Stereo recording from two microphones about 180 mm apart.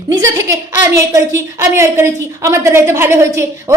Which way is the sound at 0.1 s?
20° right (ahead or behind).